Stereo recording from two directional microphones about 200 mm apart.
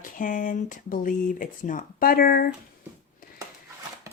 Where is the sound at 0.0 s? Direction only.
40° left (ahead or behind).